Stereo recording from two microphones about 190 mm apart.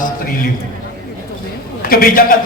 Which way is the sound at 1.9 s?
50° left (ahead or behind).